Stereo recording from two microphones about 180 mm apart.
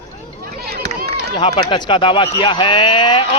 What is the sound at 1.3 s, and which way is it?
Speech, 25° left (ahead or behind).